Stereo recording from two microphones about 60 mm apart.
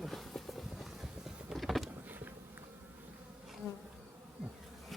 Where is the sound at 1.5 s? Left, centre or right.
Centre.